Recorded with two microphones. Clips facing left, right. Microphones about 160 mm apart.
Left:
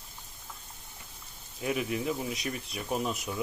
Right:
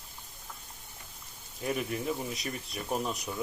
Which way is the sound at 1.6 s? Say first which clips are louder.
Left 2 dB; 5° left (ahead or behind).